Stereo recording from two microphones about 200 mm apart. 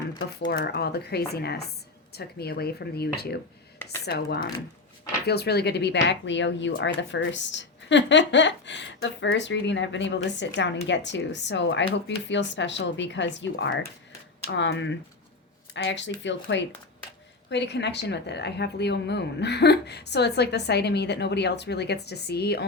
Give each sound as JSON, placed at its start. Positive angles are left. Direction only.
{"t": 0.3, "sound": "speech", "side_deg": 55}